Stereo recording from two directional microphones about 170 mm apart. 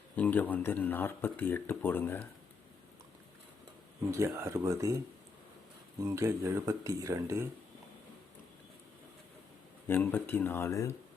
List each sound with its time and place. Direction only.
0.2 s speech: 10° left (ahead or behind)
4.1 s speech: 15° right (ahead or behind)
6.0 s speech: 20° right (ahead or behind)
9.8 s speech: 10° left (ahead or behind)